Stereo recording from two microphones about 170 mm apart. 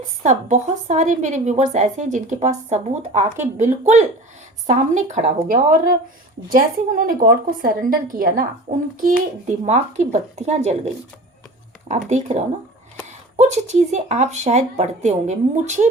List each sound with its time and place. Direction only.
0.2 s a woman's voice: 45° right (ahead or behind)
9.6 s speech: 40° right (ahead or behind)
11.9 s a woman's voice: 40° right (ahead or behind)